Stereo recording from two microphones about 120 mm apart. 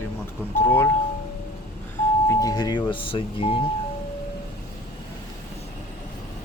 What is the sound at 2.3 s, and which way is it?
Doorbell, 30° left (ahead or behind).